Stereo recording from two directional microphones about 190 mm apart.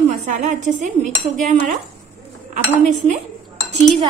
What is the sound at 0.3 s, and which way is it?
Cutlery, 40° right (ahead or behind).